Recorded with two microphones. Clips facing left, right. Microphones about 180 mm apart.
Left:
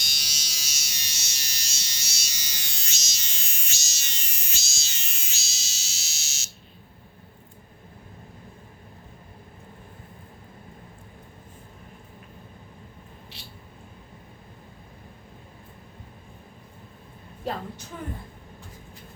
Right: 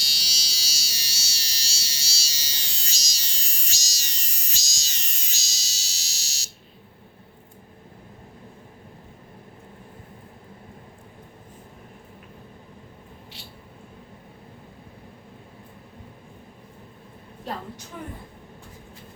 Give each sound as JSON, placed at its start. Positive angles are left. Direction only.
{"t": 0.0, "sound": "fire alarm", "side_deg": -30}